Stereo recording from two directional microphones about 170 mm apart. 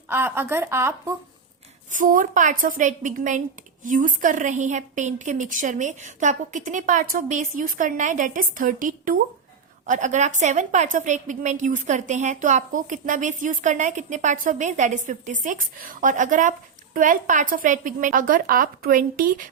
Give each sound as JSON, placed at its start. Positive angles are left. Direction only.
{"t": 0.1, "sound": "a woman's voice", "side_deg": -15}
{"t": 1.9, "sound": "a woman's voice", "side_deg": -50}